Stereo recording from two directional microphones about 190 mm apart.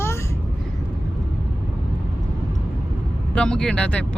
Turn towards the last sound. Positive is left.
turn(degrees=5)  # may be behind; listen again after turning